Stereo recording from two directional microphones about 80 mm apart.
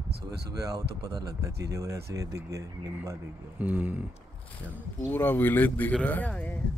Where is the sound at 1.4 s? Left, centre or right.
Right.